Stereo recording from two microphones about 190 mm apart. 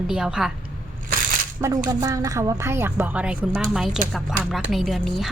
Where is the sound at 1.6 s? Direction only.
15° right (ahead or behind).